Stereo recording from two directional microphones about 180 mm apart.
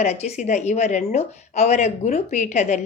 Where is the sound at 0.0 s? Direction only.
40° left (ahead or behind).